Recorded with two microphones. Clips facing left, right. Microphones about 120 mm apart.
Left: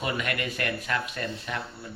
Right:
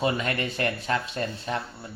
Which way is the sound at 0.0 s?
30° right (ahead or behind).